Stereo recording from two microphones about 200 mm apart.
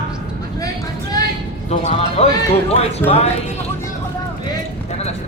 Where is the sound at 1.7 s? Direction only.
30° left (ahead or behind).